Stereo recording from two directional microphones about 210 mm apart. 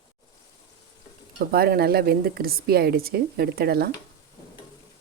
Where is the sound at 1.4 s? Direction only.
45° right (ahead or behind).